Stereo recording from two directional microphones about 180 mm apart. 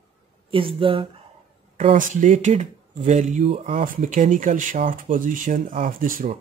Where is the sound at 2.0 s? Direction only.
45° right (ahead or behind).